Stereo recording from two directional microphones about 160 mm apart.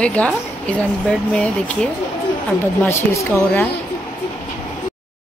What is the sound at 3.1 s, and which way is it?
Speech, 15° left (ahead or behind).